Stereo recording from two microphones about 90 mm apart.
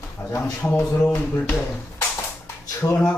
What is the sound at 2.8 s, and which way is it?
Speech, 30° left (ahead or behind).